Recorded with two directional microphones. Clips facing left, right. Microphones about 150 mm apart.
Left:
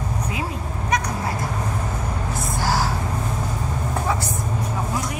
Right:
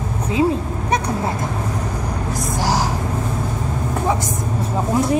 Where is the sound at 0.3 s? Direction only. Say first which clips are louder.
Right 10 dB; 30° right (ahead or behind).